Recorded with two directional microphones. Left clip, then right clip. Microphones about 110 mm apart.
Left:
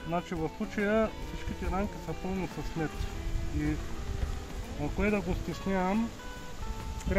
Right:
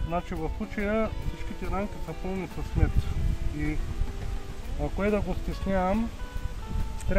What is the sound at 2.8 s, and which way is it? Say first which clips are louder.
Speech: right 1 dB; 15° right (ahead or behind).